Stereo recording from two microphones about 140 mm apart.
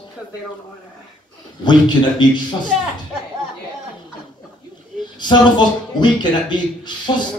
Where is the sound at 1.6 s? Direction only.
30° left (ahead or behind).